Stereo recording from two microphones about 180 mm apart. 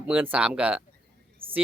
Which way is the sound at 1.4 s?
30° right (ahead or behind).